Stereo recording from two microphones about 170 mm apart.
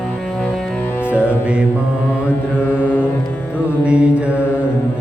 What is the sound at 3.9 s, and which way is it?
Mantra, 5° right (ahead or behind).